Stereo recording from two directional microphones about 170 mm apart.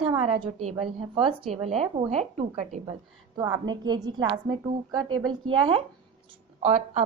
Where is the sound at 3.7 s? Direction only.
25° right (ahead or behind).